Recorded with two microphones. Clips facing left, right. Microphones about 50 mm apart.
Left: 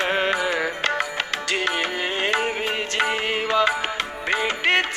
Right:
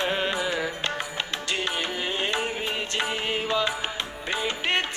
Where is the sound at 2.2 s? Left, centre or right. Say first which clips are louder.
Left 7 dB; left.